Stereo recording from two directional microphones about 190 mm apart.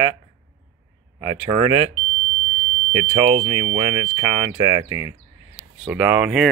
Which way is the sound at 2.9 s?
25° right (ahead or behind).